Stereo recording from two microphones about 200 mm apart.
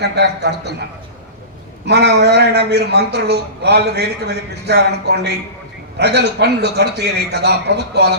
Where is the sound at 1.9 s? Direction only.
55° right (ahead or behind).